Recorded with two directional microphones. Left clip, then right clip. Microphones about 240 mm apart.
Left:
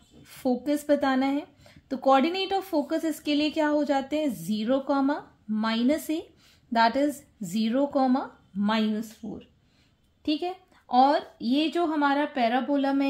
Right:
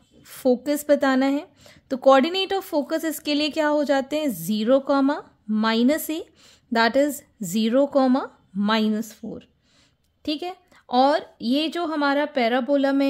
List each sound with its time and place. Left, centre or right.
0.2 s a woman's voice: right